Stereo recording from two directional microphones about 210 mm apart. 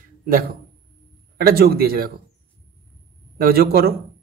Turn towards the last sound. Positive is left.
turn(degrees=-45)  # may be behind; listen again after turning